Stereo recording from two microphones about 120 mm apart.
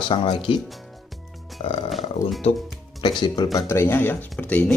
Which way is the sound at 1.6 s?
45° left (ahead or behind).